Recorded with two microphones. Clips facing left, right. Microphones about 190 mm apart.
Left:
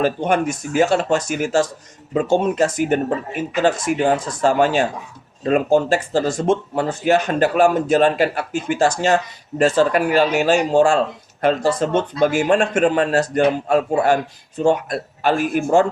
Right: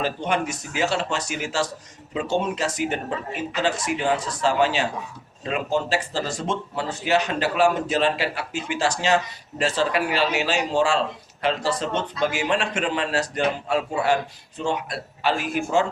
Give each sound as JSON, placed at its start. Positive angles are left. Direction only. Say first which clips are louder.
{"t": 0.0, "sound": "speech", "louder": "left 6 dB", "side_deg": 50}